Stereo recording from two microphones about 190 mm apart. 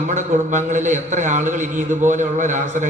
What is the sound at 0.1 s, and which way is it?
A man's voice, 40° right (ahead or behind).